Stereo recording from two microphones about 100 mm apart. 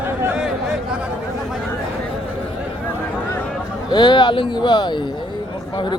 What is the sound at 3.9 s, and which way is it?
A man's voice, 50° left (ahead or behind).